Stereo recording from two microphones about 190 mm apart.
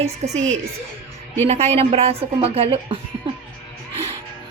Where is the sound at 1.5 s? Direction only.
35° right (ahead or behind).